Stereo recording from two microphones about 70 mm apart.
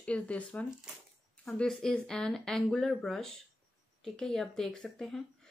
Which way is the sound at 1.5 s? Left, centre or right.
Centre.